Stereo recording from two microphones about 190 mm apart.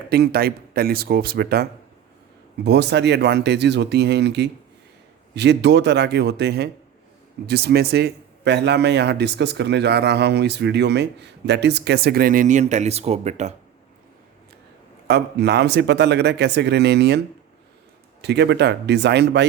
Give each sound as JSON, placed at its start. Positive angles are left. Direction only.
{"t": 0.1, "sound": "a man's voice", "side_deg": -55}
{"t": 2.6, "sound": "a man's voice", "side_deg": -60}
{"t": 15.0, "sound": "a man's voice", "side_deg": -60}